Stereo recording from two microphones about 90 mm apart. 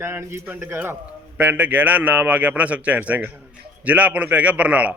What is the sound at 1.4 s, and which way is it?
A man's voice, 15° right (ahead or behind).